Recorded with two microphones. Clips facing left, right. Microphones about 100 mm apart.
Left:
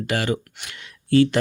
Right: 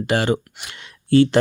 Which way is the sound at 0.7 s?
30° right (ahead or behind).